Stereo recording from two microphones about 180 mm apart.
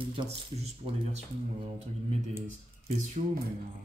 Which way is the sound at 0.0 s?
30° right (ahead or behind).